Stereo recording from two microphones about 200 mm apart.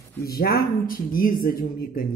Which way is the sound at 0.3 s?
50° left (ahead or behind).